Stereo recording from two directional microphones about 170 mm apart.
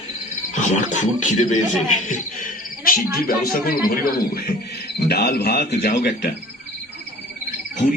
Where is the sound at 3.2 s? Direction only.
60° left (ahead or behind).